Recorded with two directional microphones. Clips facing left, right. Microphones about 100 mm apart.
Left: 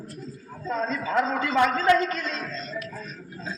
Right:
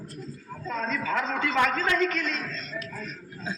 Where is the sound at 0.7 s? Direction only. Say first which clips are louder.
Left 2 dB; 40° left (ahead or behind).